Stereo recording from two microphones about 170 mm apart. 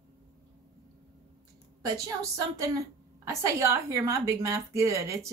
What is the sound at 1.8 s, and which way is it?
A woman's voice, 20° right (ahead or behind).